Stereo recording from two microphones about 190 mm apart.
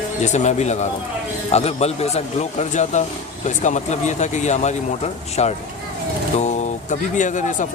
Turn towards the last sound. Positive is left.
turn(degrees=40)  # may be behind; listen again after turning